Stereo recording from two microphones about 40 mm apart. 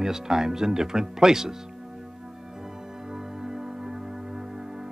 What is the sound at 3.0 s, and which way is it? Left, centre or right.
Music, centre.